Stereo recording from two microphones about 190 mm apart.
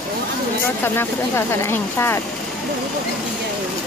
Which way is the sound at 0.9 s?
15° left (ahead or behind).